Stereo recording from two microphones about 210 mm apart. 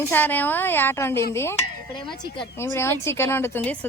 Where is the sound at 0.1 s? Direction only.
10° left (ahead or behind).